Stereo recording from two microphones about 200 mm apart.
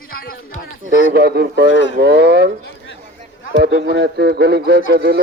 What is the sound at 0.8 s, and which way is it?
Speech, 50° right (ahead or behind).